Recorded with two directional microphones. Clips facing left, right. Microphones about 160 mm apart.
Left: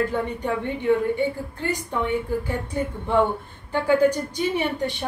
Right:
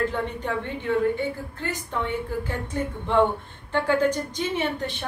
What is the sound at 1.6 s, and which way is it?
A woman's voice, 15° left (ahead or behind).